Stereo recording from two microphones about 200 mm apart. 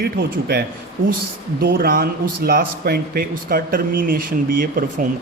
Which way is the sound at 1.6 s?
50° right (ahead or behind).